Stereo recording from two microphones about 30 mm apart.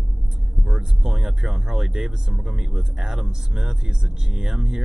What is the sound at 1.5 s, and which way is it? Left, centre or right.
Speech, right.